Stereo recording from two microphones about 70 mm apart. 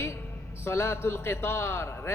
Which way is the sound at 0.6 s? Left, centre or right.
Left.